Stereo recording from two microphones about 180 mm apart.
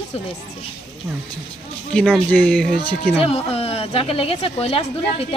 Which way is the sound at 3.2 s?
35° left (ahead or behind).